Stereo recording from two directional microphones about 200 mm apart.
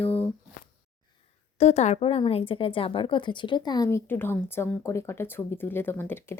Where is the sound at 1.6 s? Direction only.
35° left (ahead or behind).